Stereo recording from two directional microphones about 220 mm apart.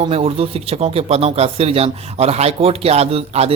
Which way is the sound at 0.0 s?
25° right (ahead or behind).